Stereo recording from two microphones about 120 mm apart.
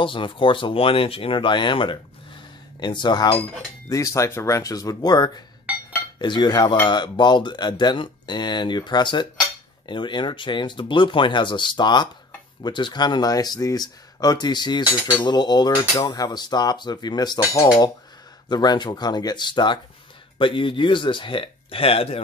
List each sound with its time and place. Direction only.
0.0 s speech: 45° left (ahead or behind)
3.9 s speech: 25° left (ahead or behind); by 22.2 s 55° left (ahead or behind)